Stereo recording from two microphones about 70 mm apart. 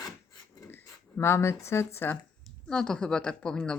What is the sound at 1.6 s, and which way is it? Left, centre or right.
Speech, left.